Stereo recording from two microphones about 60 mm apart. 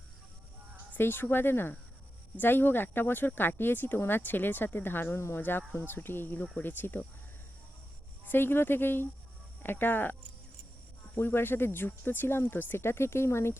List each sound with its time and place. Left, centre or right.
0.9 s speech: left
5.1 s speech: left
5.4 s speech: left
8.3 s speech: left